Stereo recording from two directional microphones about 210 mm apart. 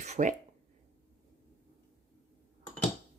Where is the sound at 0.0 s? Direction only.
35° right (ahead or behind).